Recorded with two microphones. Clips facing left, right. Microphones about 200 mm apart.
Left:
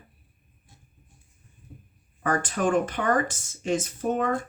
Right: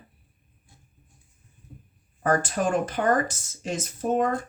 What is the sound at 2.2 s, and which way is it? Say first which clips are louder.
Speech: right 1 dB; 40° right (ahead or behind).